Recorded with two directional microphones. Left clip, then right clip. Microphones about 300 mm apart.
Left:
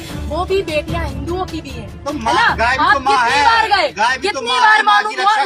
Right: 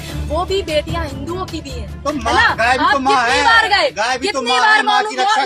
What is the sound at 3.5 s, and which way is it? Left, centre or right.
Speech, centre.